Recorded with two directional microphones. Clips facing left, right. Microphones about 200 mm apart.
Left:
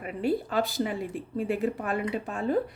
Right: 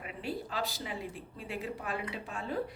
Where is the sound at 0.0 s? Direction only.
50° left (ahead or behind).